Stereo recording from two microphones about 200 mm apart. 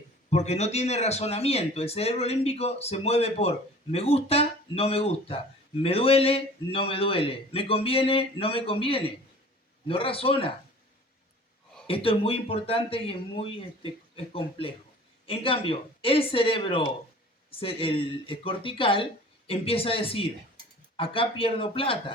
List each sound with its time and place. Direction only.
0.3 s a man's voice: 35° left (ahead or behind)
11.9 s a man's voice: 30° left (ahead or behind)
15.3 s a man's voice: 25° left (ahead or behind)